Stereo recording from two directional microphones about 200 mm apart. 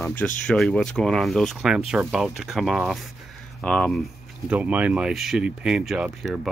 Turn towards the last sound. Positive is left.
turn(degrees=0)  # may be behind; listen again after turning